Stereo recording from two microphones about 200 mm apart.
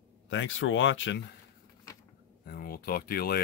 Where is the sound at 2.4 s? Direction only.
50° left (ahead or behind).